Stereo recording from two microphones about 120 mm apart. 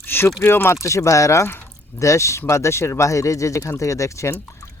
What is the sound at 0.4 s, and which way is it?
Speech, 20° left (ahead or behind).